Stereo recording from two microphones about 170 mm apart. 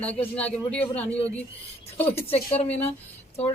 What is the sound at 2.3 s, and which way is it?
Speech, 35° left (ahead or behind).